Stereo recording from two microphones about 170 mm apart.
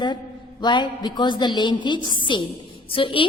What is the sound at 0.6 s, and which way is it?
A woman's voice, 25° left (ahead or behind).